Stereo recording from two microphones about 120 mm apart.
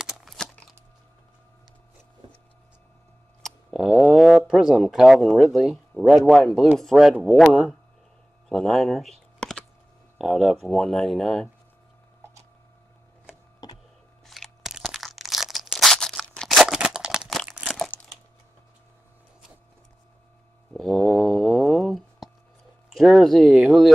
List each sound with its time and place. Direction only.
0.0 s a sound: centre (ahead or behind)
3.4 s speech: 5° right (ahead or behind)
8.5 s computer keyboard: 5° left (ahead or behind)
10.1 s speech: 5° right (ahead or behind)
13.6 s printer: 35° left (ahead or behind)
14.2 s crunch: centre (ahead or behind)
17.6 s crumpling: centre (ahead or behind)
20.7 s a sound: centre (ahead or behind)
22.8 s speech: 5° right (ahead or behind)